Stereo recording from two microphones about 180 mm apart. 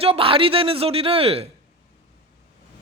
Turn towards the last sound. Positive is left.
turn(degrees=-30)  # may be behind; listen again after turning